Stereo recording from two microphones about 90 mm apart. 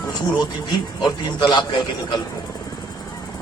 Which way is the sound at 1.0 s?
55° left (ahead or behind).